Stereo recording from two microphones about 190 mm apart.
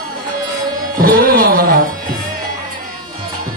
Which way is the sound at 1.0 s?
50° right (ahead or behind).